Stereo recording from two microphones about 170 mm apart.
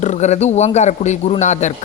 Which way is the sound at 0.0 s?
40° left (ahead or behind).